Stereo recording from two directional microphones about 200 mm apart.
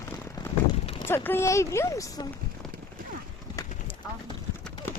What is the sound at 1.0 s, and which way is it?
Speech, 10° left (ahead or behind).